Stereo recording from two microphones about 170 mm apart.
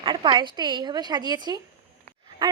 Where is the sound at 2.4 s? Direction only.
25° right (ahead or behind).